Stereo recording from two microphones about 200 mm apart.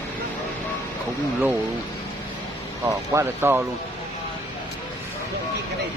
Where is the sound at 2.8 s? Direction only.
15° right (ahead or behind).